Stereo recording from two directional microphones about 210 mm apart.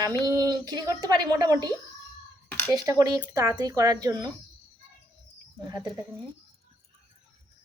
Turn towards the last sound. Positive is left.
turn(degrees=-20)  # may be behind; listen again after turning